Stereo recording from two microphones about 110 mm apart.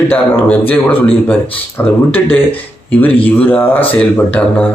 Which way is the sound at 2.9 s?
15° left (ahead or behind).